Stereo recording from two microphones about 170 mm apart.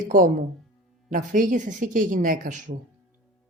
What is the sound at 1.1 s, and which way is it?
Speech, 50° right (ahead or behind).